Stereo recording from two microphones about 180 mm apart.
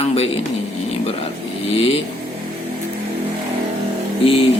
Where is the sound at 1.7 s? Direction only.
30° left (ahead or behind).